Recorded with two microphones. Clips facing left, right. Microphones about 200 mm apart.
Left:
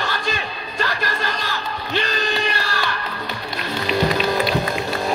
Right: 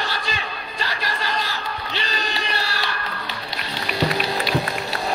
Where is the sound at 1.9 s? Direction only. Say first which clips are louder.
Left 8 dB; 50° left (ahead or behind).